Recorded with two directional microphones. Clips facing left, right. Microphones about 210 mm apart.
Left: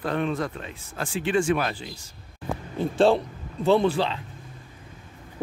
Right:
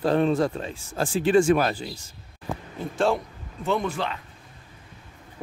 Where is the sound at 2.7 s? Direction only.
30° left (ahead or behind).